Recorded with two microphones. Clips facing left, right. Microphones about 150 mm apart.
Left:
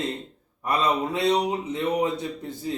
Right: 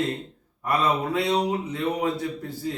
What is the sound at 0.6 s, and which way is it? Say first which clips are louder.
Speech: even; 20° left (ahead or behind).